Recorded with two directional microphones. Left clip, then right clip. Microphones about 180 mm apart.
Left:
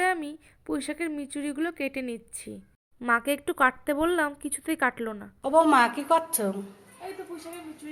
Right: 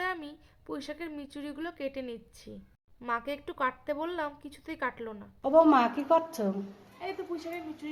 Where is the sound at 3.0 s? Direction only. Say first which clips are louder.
Left 8 dB; 25° left (ahead or behind).